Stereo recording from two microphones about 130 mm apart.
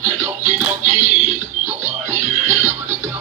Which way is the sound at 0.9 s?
65° right (ahead or behind).